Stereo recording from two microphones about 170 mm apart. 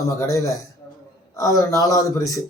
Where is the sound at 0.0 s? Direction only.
20° left (ahead or behind).